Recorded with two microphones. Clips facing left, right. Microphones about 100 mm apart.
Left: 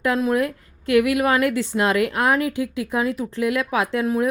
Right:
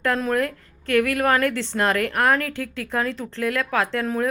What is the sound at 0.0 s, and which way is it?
A woman's voice, 10° left (ahead or behind).